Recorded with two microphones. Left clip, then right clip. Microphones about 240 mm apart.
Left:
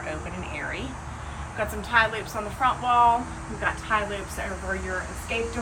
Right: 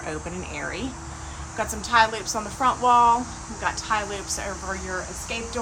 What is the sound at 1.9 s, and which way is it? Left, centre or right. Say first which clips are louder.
A woman's voice: right 3 dB; centre.